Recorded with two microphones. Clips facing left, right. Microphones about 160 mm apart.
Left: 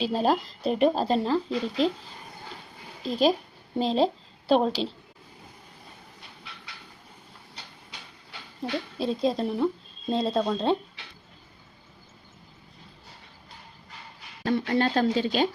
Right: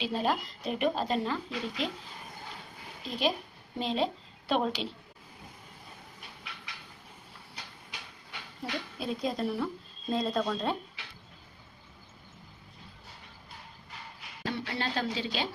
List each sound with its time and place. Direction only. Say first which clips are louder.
0.0 s a woman's voice: left 6 dB; 35° left (ahead or behind)
3.0 s a woman's voice: left 8 dB; 35° left (ahead or behind)
8.6 s a woman's voice: left 7 dB; 30° left (ahead or behind)
14.4 s speech: left 10 dB; 50° left (ahead or behind)